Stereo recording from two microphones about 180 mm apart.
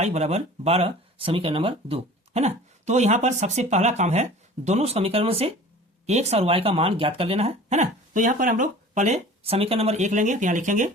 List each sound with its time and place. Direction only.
0.0 s speech: 35° right (ahead or behind)